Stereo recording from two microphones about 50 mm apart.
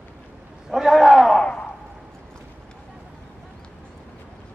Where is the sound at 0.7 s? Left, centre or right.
Centre.